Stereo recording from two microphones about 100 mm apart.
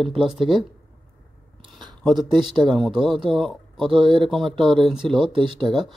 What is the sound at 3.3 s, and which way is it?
Speech, 5° left (ahead or behind).